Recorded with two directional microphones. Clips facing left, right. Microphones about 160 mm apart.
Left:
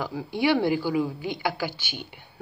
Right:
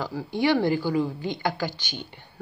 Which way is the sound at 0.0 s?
15° left (ahead or behind).